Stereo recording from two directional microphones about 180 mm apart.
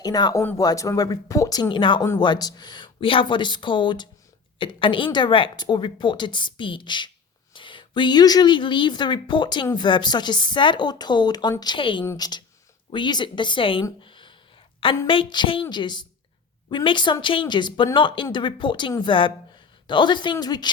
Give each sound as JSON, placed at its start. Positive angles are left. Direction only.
{"t": 0.0, "sound": "speech", "side_deg": 20}
{"t": 14.0, "sound": "a sound", "side_deg": 25}
{"t": 15.0, "sound": "speech", "side_deg": 30}